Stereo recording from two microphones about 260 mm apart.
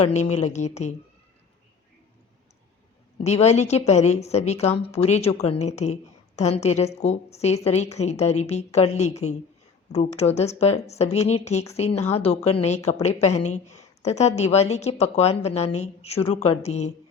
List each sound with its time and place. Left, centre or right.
0.0 s a woman's voice: left
3.2 s a woman's voice: left